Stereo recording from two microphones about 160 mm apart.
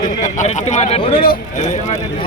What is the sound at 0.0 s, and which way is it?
Speech, 50° left (ahead or behind).